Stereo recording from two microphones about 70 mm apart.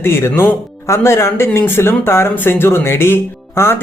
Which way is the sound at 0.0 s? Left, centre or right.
Left.